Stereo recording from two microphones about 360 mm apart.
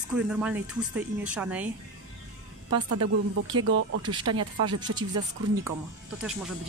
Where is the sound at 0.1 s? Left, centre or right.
Centre.